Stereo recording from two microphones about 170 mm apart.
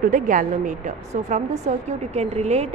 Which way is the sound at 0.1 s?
50° right (ahead or behind).